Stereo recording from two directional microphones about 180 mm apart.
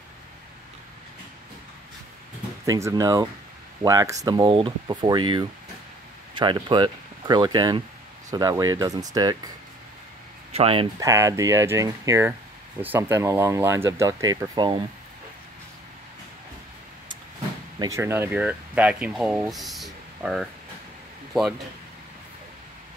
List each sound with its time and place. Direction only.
2.6 s speech: 20° right (ahead or behind)
10.5 s speech: 30° right (ahead or behind)
11.0 s speech: 15° right (ahead or behind)
17.7 s speech: 15° right (ahead or behind); by 21.5 s centre (ahead or behind)